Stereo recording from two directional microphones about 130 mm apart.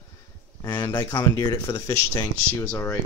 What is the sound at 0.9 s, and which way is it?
Speech, 30° left (ahead or behind).